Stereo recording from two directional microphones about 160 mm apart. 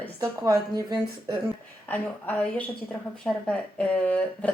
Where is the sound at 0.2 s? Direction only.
20° right (ahead or behind).